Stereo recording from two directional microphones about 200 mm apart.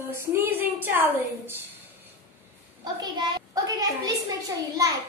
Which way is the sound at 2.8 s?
20° right (ahead or behind).